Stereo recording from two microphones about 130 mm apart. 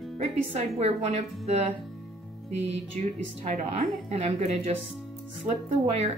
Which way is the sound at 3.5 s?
60° right (ahead or behind).